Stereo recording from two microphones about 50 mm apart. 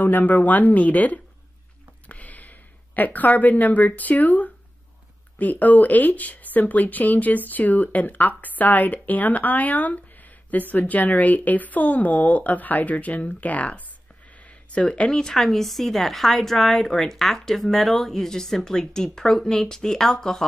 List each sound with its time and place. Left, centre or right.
0.0 s speech: left
14.4 s a sound: left
15.3 s a woman's voice: centre